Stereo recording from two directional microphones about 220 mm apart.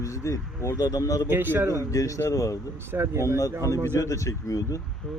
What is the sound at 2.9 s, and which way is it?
Speech, 10° right (ahead or behind).